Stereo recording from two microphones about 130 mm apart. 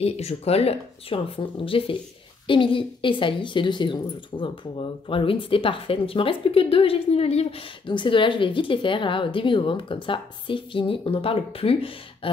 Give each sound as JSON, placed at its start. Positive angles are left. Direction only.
{"t": 0.0, "sound": "speech", "side_deg": 55}